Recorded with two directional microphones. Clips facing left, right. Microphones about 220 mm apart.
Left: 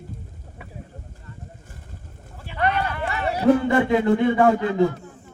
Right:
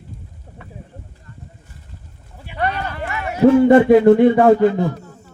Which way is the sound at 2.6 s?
35° right (ahead or behind).